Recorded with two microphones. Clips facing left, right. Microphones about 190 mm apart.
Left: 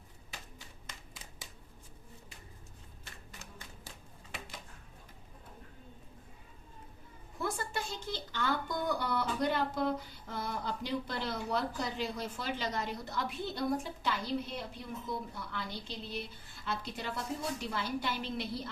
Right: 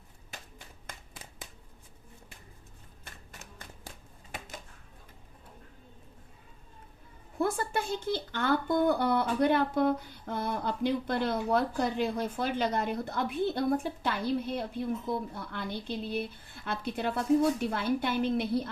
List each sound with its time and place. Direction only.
0.9 s shuffling cards: 55° right (ahead or behind)
3.6 s a sound: 50° right (ahead or behind)
7.3 s speech: 55° right (ahead or behind)